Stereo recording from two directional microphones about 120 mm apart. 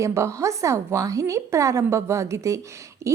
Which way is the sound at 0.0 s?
25° right (ahead or behind).